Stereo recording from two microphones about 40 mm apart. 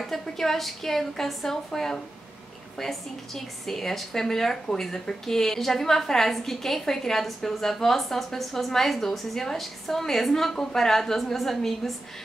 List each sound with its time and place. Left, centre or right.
0.0 s a woman's voice: centre